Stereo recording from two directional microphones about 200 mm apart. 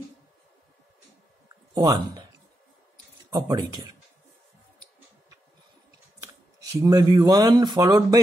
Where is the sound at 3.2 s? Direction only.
20° right (ahead or behind).